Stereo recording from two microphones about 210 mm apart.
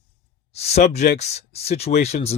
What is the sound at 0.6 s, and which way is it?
Speech, 30° left (ahead or behind).